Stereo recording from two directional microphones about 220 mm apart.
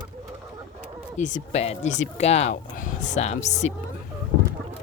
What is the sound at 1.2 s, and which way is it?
Speech, 35° left (ahead or behind).